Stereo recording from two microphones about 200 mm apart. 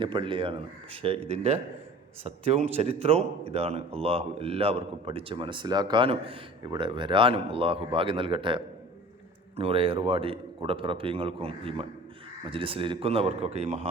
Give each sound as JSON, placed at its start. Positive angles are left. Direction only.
{"t": 0.0, "sound": "speech", "side_deg": -25}